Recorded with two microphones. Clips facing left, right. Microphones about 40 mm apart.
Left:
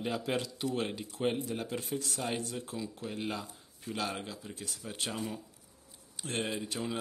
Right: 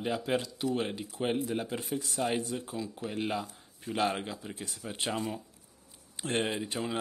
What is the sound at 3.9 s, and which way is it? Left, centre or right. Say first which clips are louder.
Speech: right 6 dB; right.